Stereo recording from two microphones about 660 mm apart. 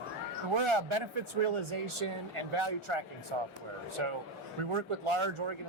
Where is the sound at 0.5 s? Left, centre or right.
Right.